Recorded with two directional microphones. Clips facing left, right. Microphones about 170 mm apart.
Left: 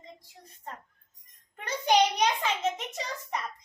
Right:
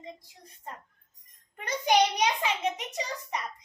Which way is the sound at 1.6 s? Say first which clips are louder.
Even; 15° right (ahead or behind).